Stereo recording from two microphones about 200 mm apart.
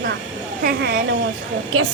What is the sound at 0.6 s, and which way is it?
Speech, 55° right (ahead or behind).